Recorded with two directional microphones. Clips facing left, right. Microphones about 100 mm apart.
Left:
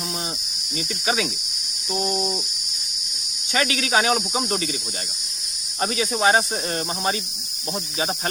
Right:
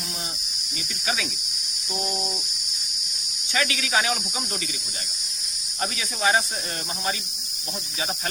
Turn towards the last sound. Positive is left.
turn(degrees=30)  # may be behind; listen again after turning